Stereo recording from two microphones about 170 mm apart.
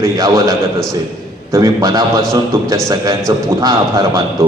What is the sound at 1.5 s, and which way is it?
A man's voice, 20° right (ahead or behind).